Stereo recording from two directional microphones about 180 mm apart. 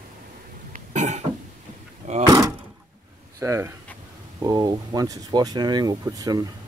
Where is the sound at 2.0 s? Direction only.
40° right (ahead or behind).